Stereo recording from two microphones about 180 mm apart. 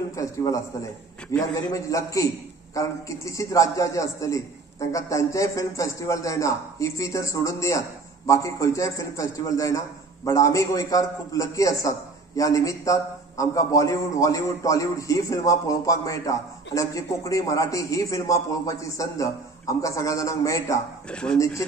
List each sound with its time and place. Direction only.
0.1 s a man's voice: 20° left (ahead or behind)
21.1 s speech: 5° left (ahead or behind)
21.6 s a man's voice: 15° left (ahead or behind)